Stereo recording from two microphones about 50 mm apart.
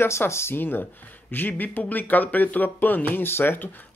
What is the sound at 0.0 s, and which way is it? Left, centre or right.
Speech, left.